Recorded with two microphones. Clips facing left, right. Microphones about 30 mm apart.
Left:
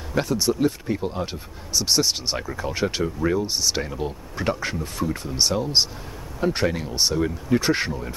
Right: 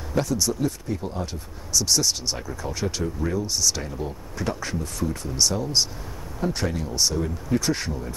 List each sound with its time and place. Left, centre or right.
0.1 s speech: left